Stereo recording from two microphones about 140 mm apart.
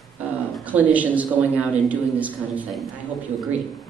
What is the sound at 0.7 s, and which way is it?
A man's voice, 10° right (ahead or behind).